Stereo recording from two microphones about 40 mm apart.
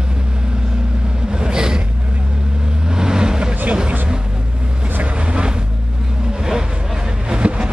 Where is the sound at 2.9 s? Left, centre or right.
Centre.